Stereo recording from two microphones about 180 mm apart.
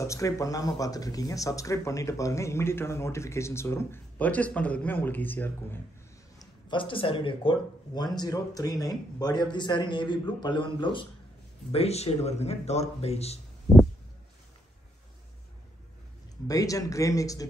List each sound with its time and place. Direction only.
0.0 s speech: 15° left (ahead or behind)
6.4 s a man's voice: 25° left (ahead or behind)
16.4 s a man's voice: 20° left (ahead or behind)